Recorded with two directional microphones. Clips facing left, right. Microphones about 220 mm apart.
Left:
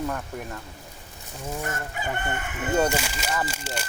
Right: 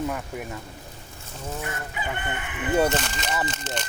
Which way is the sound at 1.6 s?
45° left (ahead or behind).